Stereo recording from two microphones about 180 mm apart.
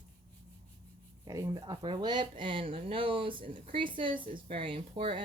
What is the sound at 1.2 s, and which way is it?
Speech, 20° right (ahead or behind).